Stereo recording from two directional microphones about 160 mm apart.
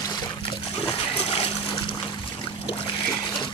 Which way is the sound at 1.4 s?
35° left (ahead or behind).